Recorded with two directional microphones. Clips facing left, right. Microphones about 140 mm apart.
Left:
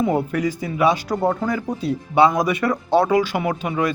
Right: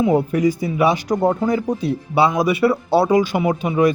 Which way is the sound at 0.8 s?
15° right (ahead or behind).